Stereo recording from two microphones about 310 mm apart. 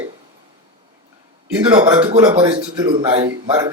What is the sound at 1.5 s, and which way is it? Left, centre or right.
A man's voice, centre.